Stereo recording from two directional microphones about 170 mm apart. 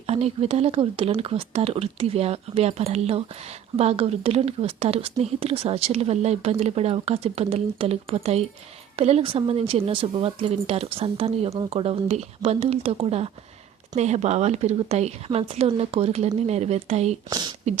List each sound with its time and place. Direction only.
0.1 s speech: 35° right (ahead or behind)
17.2 s speech: 25° right (ahead or behind)